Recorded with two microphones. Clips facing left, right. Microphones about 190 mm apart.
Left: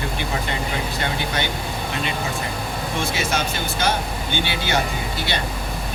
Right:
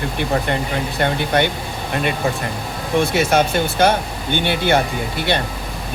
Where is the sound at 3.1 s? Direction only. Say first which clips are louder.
Right 8 dB; 55° right (ahead or behind).